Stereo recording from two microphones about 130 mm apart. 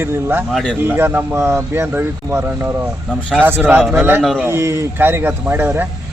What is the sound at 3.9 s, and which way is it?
Speech, 15° right (ahead or behind).